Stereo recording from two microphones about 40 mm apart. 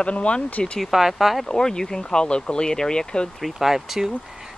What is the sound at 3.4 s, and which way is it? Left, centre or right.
Speech, centre.